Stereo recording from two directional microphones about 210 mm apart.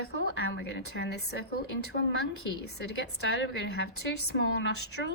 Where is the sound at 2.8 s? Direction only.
55° left (ahead or behind).